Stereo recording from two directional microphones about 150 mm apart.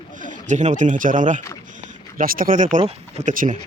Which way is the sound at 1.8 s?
65° right (ahead or behind).